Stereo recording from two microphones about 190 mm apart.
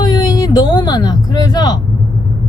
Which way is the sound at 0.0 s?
20° left (ahead or behind).